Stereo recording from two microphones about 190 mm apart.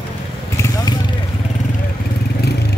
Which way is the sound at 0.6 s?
20° left (ahead or behind).